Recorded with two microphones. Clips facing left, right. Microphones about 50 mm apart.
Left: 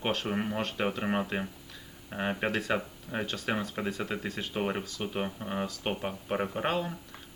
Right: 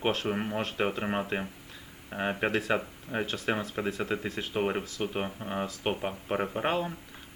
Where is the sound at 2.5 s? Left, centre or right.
Centre.